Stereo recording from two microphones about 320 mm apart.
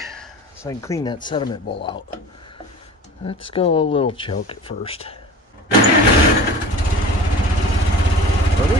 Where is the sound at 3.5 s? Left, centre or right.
Centre.